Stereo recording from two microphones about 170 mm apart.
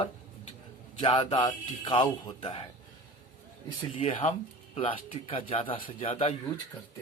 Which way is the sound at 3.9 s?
35° left (ahead or behind).